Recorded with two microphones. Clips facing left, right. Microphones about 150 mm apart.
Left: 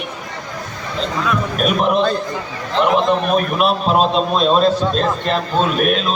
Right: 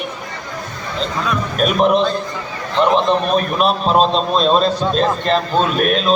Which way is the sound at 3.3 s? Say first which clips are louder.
Even; 5° left (ahead or behind).